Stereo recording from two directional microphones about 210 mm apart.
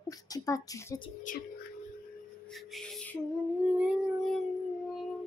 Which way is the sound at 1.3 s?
40° left (ahead or behind).